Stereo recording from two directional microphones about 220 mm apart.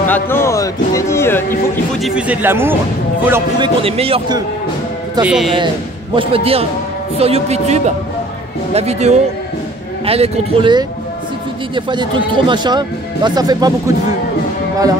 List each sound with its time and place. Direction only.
0.0 s speech: 10° left (ahead or behind)
2.0 s speech: centre (ahead or behind); by 4.4 s 25° right (ahead or behind)
5.2 s speech: 5° right (ahead or behind)
6.1 s speech: 25° right (ahead or behind)